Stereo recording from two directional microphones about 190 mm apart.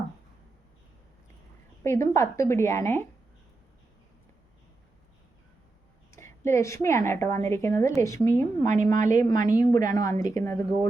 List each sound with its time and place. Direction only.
1.8 s a woman's voice: 15° left (ahead or behind)
6.1 s a woman's voice: 15° left (ahead or behind)